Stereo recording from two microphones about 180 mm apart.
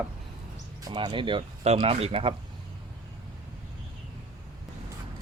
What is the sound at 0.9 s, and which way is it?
Speech, 25° right (ahead or behind).